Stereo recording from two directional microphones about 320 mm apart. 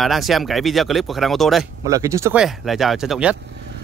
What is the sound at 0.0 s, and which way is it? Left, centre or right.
Speech, centre.